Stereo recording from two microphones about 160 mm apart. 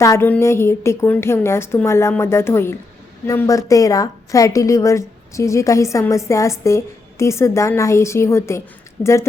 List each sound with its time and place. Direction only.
0.0 s a woman's voice: 15° left (ahead or behind)